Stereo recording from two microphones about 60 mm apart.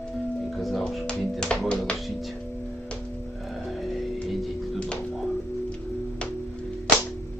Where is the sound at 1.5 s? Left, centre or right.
Centre.